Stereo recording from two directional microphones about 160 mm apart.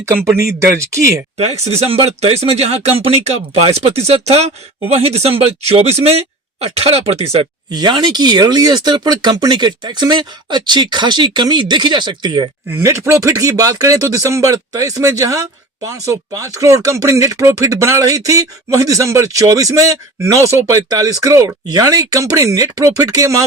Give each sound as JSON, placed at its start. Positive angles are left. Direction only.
{"t": 0.0, "sound": "speech", "side_deg": -15}
{"t": 1.6, "sound": "speech", "side_deg": -40}
{"t": 7.7, "sound": "speech", "side_deg": -25}
{"t": 12.7, "sound": "speech", "side_deg": -15}